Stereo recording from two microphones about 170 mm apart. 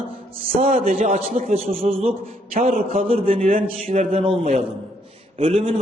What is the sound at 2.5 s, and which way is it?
Speech, 55° right (ahead or behind).